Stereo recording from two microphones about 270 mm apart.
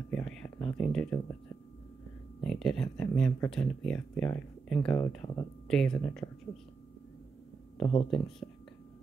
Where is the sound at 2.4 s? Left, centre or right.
Centre.